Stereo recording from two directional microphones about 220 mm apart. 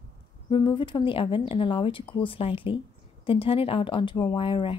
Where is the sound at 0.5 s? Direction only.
20° left (ahead or behind).